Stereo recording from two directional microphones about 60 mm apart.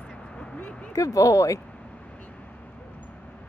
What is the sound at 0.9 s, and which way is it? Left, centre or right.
Speech, left.